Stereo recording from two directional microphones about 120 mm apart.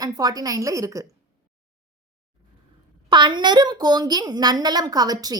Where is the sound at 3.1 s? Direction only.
40° right (ahead or behind).